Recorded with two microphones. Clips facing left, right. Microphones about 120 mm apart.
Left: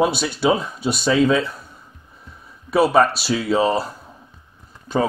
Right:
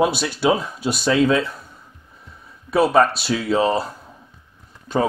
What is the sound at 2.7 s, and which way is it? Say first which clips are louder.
Speech: even; 5° left (ahead or behind).